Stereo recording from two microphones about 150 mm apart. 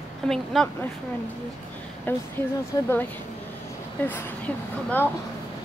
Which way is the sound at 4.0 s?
10° left (ahead or behind).